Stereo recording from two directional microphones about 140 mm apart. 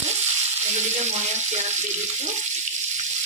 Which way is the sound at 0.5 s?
55° right (ahead or behind).